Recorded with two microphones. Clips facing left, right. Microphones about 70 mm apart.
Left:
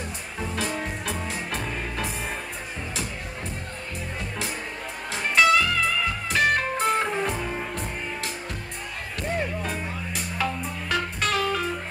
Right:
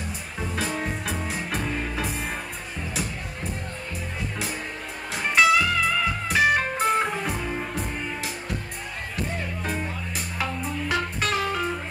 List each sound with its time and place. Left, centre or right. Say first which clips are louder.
0.4 s music: even; centre
5.1 s music: even; centre
9.7 s music: right 1 dB; centre